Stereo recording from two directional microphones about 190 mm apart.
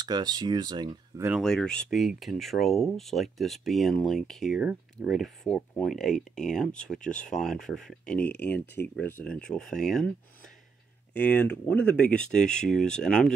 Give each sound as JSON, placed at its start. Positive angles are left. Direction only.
{"t": 0.0, "sound": "speech", "side_deg": -20}
{"t": 1.4, "sound": "speech", "side_deg": 5}
{"t": 11.1, "sound": "speech", "side_deg": 10}